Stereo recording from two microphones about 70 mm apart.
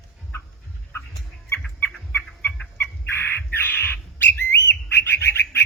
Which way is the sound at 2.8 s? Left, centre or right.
Left.